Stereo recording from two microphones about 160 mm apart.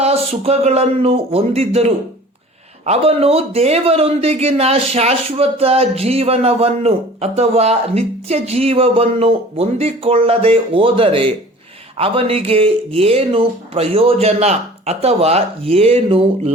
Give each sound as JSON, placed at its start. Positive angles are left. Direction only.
{"t": 0.0, "sound": "a man's voice", "side_deg": -40}